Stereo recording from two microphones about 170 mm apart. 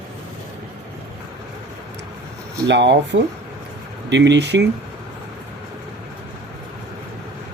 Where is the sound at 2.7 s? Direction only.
90° right.